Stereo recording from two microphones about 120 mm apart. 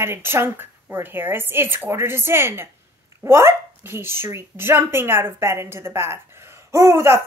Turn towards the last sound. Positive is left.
turn(degrees=-20)  # may be behind; listen again after turning